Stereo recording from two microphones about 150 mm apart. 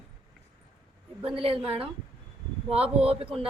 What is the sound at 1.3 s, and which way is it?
A woman's voice, 40° right (ahead or behind).